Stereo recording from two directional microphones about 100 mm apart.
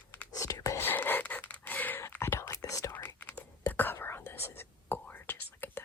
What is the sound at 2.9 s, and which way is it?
Whispering, 20° left (ahead or behind).